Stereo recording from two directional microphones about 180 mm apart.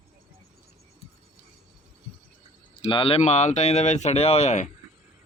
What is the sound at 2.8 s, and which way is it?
Speech, 30° left (ahead or behind).